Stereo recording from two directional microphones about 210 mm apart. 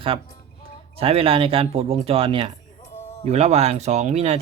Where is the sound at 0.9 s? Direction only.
25° right (ahead or behind).